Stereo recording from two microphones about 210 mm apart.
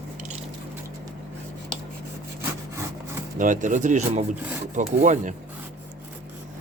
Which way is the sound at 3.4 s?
35° right (ahead or behind).